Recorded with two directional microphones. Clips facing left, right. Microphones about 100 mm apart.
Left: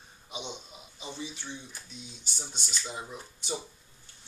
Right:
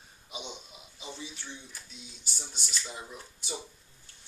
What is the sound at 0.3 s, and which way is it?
Speech, 5° right (ahead or behind).